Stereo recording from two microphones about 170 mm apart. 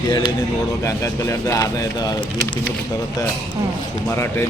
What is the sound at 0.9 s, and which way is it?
Speech, 15° left (ahead or behind).